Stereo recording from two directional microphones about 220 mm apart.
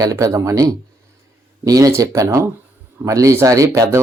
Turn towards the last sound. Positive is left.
turn(degrees=-15)  # may be behind; listen again after turning